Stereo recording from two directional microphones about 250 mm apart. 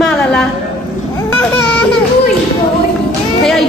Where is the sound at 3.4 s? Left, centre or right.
Centre.